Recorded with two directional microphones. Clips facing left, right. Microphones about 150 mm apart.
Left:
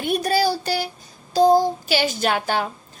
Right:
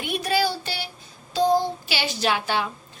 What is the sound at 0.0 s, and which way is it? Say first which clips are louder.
Child singing: left 4 dB; 45° left (ahead or behind).